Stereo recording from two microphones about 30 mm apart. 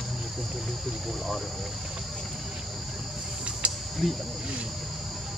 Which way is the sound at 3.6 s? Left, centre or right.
Right.